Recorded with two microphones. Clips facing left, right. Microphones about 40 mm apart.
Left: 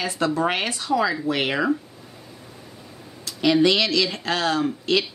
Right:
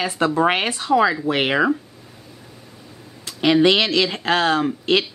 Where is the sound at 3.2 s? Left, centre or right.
Right.